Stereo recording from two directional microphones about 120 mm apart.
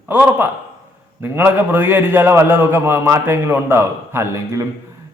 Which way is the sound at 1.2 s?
15° right (ahead or behind).